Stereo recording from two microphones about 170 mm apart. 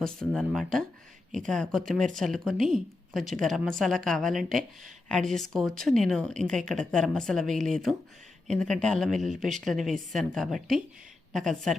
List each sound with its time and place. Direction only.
0.0 s speech: 5° left (ahead or behind)